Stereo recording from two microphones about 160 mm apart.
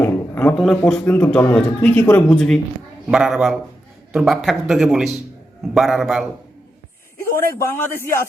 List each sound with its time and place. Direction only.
0.0 s a sound: 10° left (ahead or behind)
0.5 s a man's voice: centre (ahead or behind)
7.6 s a man's voice: 15° left (ahead or behind)